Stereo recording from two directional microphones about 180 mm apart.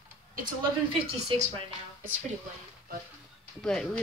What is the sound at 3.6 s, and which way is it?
Speech, 5° left (ahead or behind).